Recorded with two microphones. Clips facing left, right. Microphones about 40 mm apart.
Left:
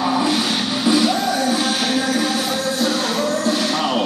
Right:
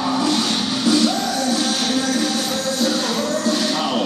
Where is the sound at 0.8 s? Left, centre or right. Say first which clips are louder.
Left 1 dB; centre.